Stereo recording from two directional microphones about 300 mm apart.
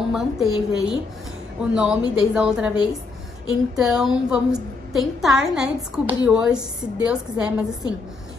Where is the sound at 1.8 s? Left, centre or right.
Centre.